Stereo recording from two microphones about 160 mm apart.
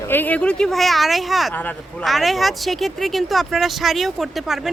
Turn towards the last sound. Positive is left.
turn(degrees=0)  # may be behind; listen again after turning